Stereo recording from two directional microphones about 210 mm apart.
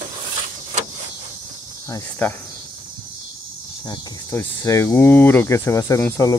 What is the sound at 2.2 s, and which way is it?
Speech, 10° left (ahead or behind).